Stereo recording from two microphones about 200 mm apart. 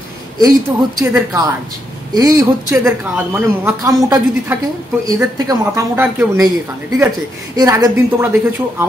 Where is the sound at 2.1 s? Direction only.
20° right (ahead or behind).